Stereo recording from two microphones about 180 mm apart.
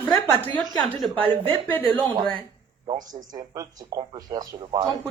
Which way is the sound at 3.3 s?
20° right (ahead or behind).